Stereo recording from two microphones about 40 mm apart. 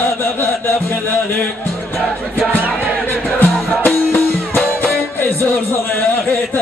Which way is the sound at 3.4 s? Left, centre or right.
Left.